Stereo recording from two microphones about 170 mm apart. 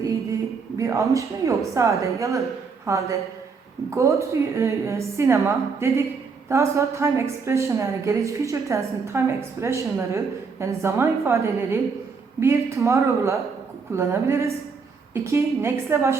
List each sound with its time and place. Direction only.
0.8 s a woman's voice: 20° right (ahead or behind)